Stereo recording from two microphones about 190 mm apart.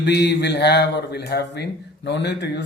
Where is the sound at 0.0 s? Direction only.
65° left (ahead or behind).